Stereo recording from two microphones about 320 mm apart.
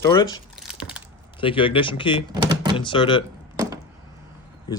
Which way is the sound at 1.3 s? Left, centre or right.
Centre.